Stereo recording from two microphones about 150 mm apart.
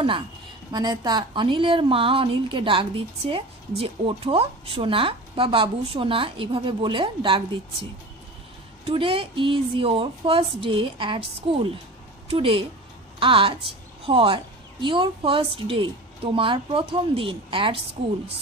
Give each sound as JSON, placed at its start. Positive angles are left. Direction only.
{"t": 0.7, "sound": "a woman's voice", "side_deg": -25}
{"t": 8.8, "sound": "a woman's voice", "side_deg": -35}